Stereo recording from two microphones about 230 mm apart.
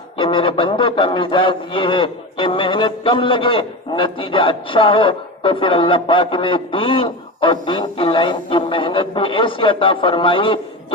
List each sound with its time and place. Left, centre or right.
0.2 s a man's voice: left